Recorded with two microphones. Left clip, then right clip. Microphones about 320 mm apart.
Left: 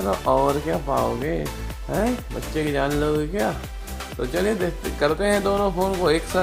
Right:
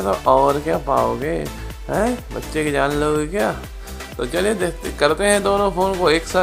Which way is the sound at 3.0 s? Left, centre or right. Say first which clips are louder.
Right 4 dB; right.